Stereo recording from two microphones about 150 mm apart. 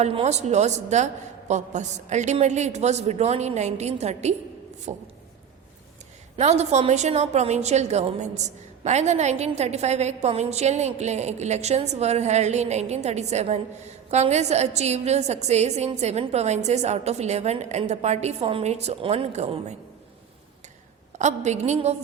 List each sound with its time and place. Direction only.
0.0 s a woman's voice: 40° right (ahead or behind)
6.3 s a woman's voice: 45° right (ahead or behind)
21.2 s a woman's voice: 50° right (ahead or behind)